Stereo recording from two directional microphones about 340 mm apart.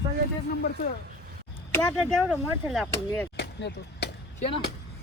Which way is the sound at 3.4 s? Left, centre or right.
Left.